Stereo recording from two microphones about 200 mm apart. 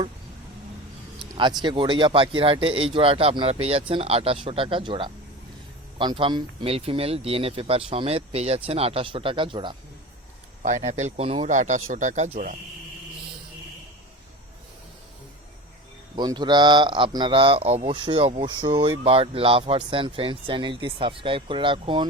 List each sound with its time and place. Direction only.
1.6 s speech: 25° right (ahead or behind)
10.6 s speech: 35° right (ahead or behind)
16.1 s speech: 20° right (ahead or behind)